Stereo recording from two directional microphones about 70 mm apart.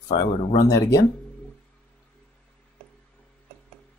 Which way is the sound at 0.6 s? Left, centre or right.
Left.